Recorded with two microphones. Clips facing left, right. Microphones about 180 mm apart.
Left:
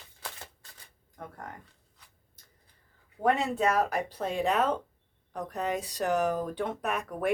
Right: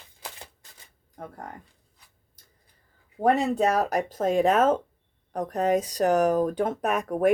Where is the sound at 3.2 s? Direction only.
40° right (ahead or behind).